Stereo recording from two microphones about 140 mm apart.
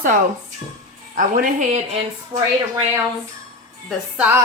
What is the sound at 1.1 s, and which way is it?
Speech, 70° right (ahead or behind).